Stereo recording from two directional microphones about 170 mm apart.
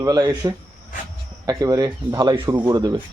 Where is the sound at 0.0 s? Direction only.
20° right (ahead or behind).